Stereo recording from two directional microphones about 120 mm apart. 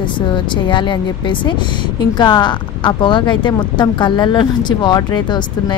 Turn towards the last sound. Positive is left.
turn(degrees=35)  # may be behind; listen again after turning